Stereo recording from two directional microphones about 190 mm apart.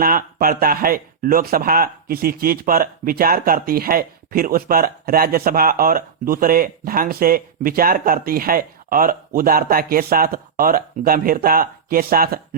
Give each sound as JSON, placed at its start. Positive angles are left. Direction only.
{"t": 0.0, "sound": "speech", "side_deg": -50}